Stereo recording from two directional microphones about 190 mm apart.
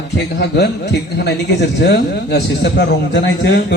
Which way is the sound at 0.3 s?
60° left (ahead or behind).